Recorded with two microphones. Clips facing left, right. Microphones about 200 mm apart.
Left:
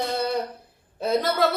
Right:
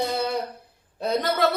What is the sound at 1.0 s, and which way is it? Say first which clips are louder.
Speech: left 1 dB; centre (ahead or behind).